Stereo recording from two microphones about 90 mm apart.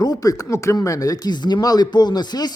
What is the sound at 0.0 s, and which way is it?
A man's voice, 45° left (ahead or behind).